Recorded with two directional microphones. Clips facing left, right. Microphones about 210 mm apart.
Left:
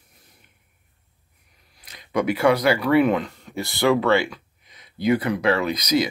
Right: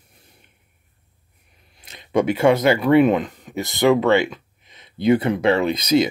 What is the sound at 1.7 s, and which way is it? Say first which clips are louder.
Speech: right 4 dB; 25° right (ahead or behind).